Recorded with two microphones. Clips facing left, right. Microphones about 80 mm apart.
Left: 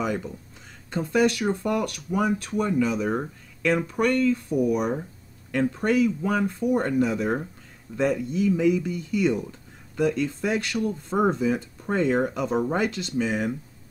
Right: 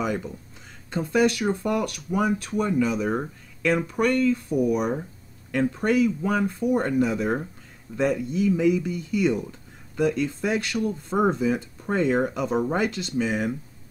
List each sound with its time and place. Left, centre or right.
0.0 s speech: centre